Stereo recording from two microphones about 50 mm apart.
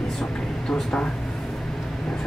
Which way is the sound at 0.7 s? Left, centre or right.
Centre.